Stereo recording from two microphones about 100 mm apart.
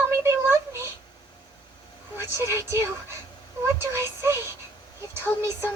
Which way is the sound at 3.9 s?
25° right (ahead or behind).